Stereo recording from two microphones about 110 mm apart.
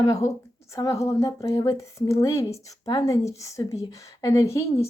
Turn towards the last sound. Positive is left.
turn(degrees=25)  # may be behind; listen again after turning